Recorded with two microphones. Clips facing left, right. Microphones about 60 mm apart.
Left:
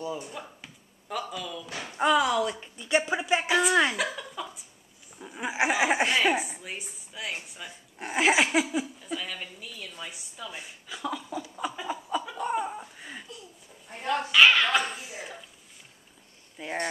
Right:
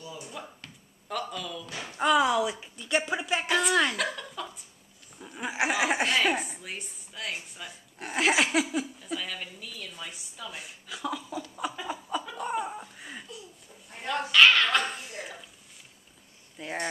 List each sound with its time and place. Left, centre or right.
0.0 s speech: left
0.3 s a woman's voice: centre
2.1 s speech: centre
2.6 s a woman's voice: centre
13.9 s dog: centre
16.6 s speech: centre